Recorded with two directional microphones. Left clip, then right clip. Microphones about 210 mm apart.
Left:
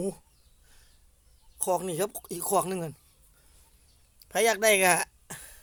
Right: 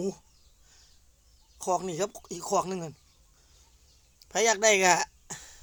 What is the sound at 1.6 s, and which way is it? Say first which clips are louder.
Speech: left 1 dB; 15° left (ahead or behind).